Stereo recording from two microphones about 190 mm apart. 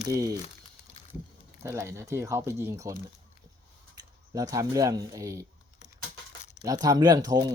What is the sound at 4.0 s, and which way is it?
Speech, 20° right (ahead or behind).